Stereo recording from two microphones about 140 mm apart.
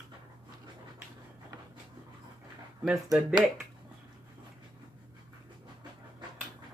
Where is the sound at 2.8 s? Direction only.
Centre (ahead or behind).